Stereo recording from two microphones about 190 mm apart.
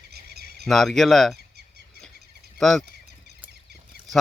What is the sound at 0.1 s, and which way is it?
Frog, 55° right (ahead or behind).